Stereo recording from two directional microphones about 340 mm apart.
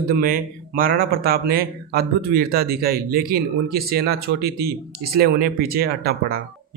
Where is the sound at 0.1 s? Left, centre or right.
Right.